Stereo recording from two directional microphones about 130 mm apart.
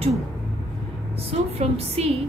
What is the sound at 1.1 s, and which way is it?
A woman's voice, 50° right (ahead or behind).